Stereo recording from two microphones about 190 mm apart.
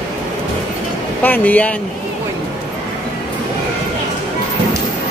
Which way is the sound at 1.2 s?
10° left (ahead or behind).